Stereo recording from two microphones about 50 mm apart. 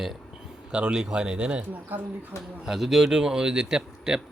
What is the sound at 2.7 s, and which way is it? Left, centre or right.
A man's voice, centre.